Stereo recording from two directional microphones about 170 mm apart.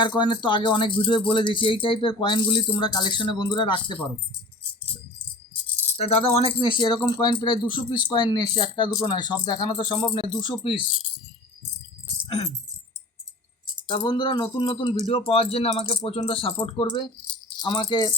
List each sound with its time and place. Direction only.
0.0 s speech: 25° left (ahead or behind)
6.0 s speech: 35° left (ahead or behind)
13.8 s speech: 25° left (ahead or behind)